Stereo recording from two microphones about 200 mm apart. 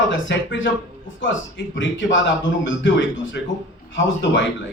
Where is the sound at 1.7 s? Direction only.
65° left (ahead or behind).